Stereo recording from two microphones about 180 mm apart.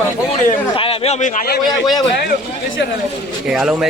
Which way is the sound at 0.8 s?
35° left (ahead or behind).